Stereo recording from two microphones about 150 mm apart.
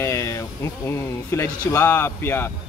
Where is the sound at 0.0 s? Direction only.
20° left (ahead or behind).